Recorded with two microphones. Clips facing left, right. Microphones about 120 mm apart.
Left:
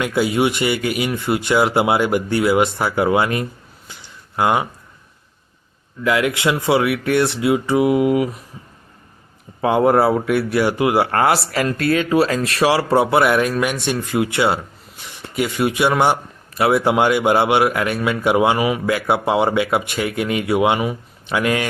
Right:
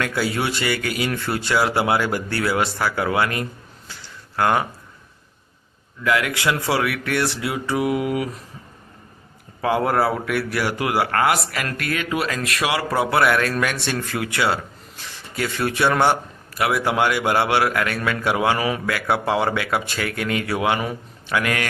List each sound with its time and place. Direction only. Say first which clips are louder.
0.0 s speech: left 5 dB; 20° left (ahead or behind)
3.8 s a sound: even; 20° left (ahead or behind)
6.0 s speech: left 3 dB; 25° left (ahead or behind)
9.6 s speech: left 5 dB; 25° left (ahead or behind)
16.6 s speech: left 5 dB; 25° left (ahead or behind)